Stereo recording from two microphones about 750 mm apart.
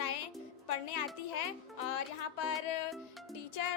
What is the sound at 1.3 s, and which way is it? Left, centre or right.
Music, left.